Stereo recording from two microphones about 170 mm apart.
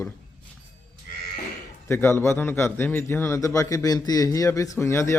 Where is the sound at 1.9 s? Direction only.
15° left (ahead or behind).